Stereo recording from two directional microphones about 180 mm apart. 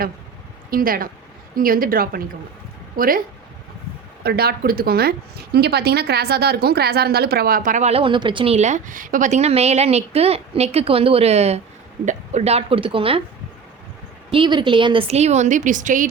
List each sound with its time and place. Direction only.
0.7 s a woman's voice: 55° right (ahead or behind)
4.2 s a woman's voice: 60° right (ahead or behind); by 13.2 s 30° right (ahead or behind)
14.3 s a woman's voice: 25° right (ahead or behind); by 16.0 s 45° right (ahead or behind)